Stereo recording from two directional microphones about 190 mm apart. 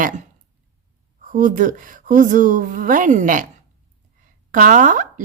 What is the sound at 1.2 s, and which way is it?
Speech, 45° right (ahead or behind).